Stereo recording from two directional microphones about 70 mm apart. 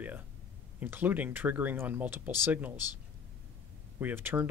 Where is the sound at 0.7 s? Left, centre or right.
Right.